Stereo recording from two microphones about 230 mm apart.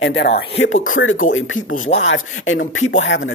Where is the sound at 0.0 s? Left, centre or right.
Left.